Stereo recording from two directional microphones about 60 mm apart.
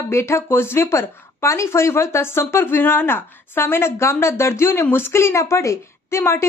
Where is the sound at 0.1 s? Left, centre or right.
Left.